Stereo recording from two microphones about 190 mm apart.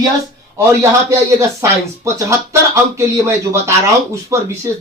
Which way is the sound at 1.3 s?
15° right (ahead or behind).